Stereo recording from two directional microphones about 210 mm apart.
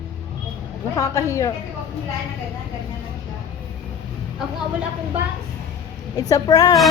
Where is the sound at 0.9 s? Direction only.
15° left (ahead or behind).